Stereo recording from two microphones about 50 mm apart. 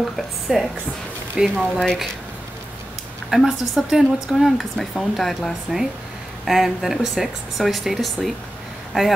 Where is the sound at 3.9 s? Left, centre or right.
Centre.